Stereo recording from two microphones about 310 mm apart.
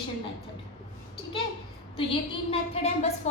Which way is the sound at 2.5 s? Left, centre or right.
Centre.